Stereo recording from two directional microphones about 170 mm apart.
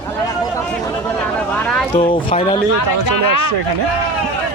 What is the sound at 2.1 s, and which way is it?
Speech, 30° left (ahead or behind).